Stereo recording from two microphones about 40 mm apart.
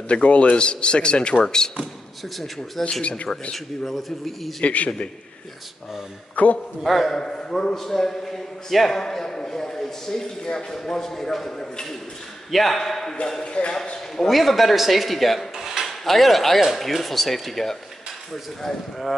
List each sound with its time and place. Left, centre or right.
0.1 s a man's voice: left
2.3 s a man's voice: centre
3.0 s a man's voice: left
3.5 s a man's voice: centre
4.6 s a man's voice: left
6.3 s a man's voice: left
6.8 s a man's voice: centre
7.1 s a man's voice: centre
13.4 s a man's voice: left
14.1 s a man's voice: centre
15.5 s cutlery: centre
16.0 s a man's voice: centre